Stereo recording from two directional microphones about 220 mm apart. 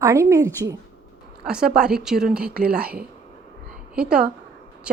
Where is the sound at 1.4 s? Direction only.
5° right (ahead or behind).